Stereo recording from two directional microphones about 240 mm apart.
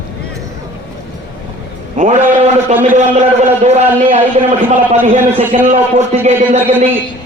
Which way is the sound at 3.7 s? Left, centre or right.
Right.